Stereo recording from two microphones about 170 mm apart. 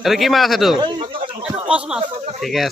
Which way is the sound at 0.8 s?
30° right (ahead or behind).